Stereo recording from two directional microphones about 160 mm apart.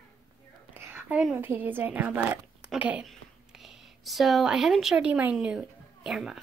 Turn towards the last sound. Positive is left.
turn(degrees=-5)  # may be behind; listen again after turning